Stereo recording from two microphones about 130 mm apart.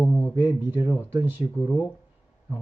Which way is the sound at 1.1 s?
15° right (ahead or behind).